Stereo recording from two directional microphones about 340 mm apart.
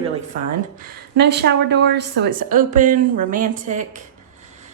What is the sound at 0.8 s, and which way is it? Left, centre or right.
A woman's voice, right.